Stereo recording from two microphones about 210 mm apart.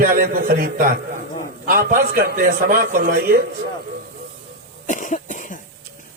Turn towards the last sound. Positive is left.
turn(degrees=40)  # may be behind; listen again after turning